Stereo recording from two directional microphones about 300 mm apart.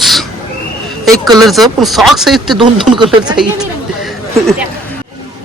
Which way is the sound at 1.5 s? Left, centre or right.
Centre.